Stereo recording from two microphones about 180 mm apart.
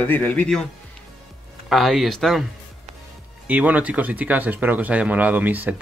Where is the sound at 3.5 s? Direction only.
10° right (ahead or behind).